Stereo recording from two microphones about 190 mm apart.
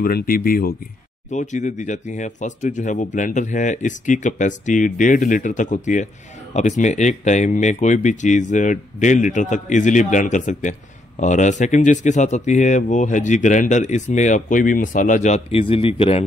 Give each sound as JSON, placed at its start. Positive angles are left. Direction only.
{"t": 0.0, "sound": "speech", "side_deg": 50}
{"t": 1.3, "sound": "speech", "side_deg": 40}